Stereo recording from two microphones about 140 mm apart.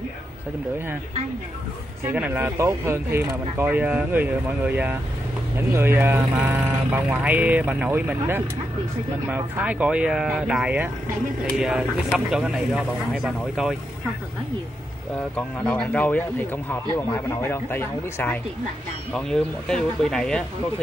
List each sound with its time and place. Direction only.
2.0 s speech: 10° right (ahead or behind)
15.3 s speech: 10° left (ahead or behind)
16.9 s speech: 20° left (ahead or behind); by 20.4 s 5° left (ahead or behind)